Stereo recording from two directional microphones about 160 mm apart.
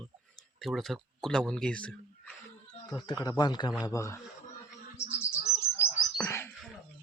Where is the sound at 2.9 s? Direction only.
25° left (ahead or behind).